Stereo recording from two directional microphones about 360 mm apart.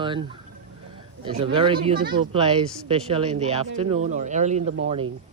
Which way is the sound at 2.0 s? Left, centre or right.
Right.